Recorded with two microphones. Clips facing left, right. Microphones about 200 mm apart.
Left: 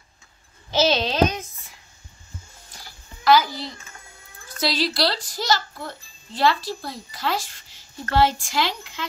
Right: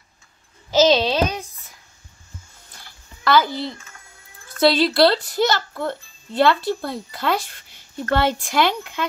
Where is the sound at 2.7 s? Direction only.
55° right (ahead or behind).